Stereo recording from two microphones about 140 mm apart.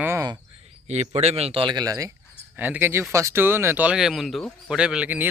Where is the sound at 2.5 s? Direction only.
15° right (ahead or behind).